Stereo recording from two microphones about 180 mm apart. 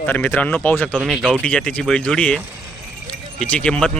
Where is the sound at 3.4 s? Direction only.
5° left (ahead or behind).